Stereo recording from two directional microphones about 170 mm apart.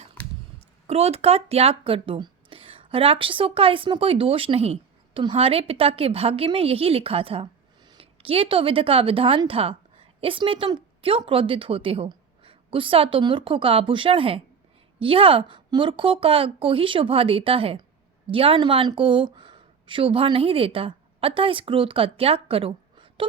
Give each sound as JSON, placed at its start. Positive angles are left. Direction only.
{"t": 0.9, "sound": "a woman's voice", "side_deg": -35}